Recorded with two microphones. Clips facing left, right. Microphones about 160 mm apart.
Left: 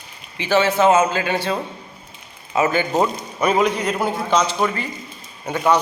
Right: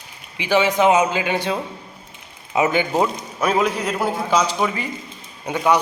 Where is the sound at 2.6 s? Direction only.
15° right (ahead or behind).